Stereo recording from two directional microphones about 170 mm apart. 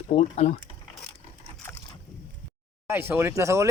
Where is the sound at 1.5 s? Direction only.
10° left (ahead or behind).